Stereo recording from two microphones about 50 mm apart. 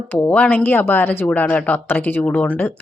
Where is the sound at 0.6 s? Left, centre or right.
Left.